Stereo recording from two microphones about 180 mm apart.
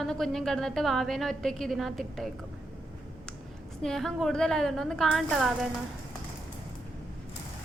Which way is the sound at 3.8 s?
Centre (ahead or behind).